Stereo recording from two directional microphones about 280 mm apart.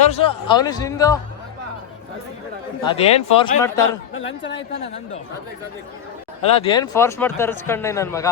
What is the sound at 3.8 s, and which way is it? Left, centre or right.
Speech, left.